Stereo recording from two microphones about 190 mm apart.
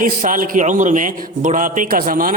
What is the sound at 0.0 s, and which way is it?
Speech, 45° right (ahead or behind).